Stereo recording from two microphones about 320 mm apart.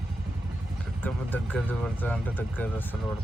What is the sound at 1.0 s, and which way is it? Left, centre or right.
Speech, centre.